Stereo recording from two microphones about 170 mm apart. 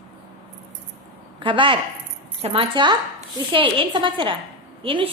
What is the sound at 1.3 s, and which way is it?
A woman's voice, 30° right (ahead or behind).